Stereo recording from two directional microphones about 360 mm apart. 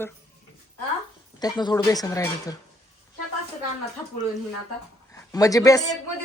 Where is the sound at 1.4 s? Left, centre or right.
Centre.